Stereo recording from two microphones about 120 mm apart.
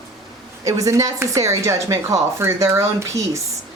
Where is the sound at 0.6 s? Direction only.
25° right (ahead or behind).